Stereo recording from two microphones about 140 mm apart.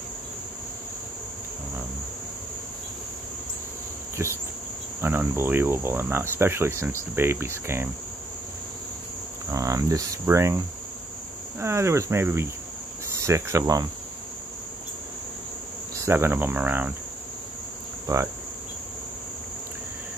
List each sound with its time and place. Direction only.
4.2 s cricket: 20° right (ahead or behind)
9.5 s cricket: 25° right (ahead or behind)
11.6 s cricket: 20° right (ahead or behind)
16.1 s cricket: 15° right (ahead or behind)
18.0 s insect: 20° right (ahead or behind)